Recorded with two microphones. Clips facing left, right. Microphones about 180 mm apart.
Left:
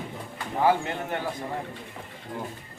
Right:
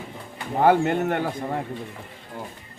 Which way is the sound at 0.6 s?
55° right (ahead or behind).